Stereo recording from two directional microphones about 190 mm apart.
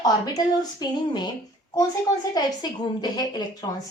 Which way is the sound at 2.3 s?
20° left (ahead or behind).